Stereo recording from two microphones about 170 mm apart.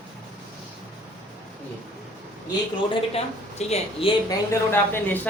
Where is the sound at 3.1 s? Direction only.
40° left (ahead or behind).